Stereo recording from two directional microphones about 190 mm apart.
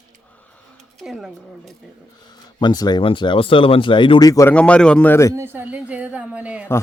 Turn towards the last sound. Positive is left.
turn(degrees=-5)  # may be behind; listen again after turning